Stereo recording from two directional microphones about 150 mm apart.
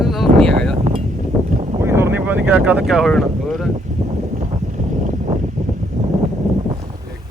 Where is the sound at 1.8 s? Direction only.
15° right (ahead or behind); by 3.7 s centre (ahead or behind).